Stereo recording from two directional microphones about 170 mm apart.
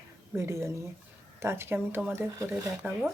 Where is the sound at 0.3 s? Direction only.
15° right (ahead or behind).